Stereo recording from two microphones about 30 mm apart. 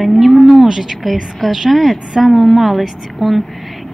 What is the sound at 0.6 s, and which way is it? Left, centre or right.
Speech, centre.